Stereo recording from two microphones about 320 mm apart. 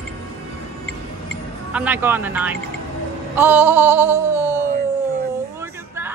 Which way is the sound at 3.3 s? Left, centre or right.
Centre.